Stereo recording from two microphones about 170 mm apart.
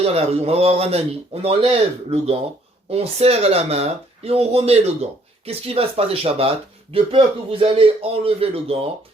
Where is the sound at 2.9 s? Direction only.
35° right (ahead or behind).